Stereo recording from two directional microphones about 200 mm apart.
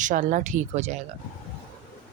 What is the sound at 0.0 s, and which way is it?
Speech, 40° right (ahead or behind).